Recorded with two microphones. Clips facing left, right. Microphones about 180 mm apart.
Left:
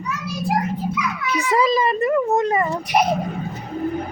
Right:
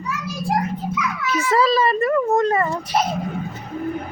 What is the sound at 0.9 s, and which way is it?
A child's voice, 15° left (ahead or behind).